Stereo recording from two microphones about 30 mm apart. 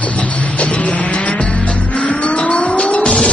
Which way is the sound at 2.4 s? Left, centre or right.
Left.